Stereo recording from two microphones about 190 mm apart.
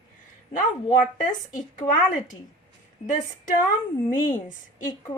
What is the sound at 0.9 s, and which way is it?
A woman's voice, 40° left (ahead or behind).